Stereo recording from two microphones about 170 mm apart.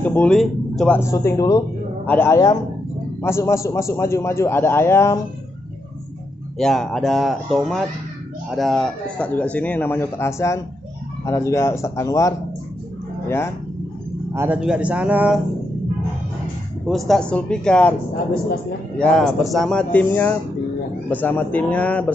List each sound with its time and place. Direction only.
0.0 s speech: 10° left (ahead or behind)
6.6 s speech: centre (ahead or behind); by 12.4 s 20° left (ahead or behind)
14.3 s speech: 15° right (ahead or behind)
16.8 s speech: centre (ahead or behind)
18.9 s speech: centre (ahead or behind)